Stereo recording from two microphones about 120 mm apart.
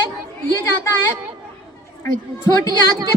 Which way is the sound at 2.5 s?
35° left (ahead or behind).